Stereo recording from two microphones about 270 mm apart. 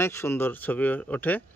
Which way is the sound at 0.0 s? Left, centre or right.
Centre.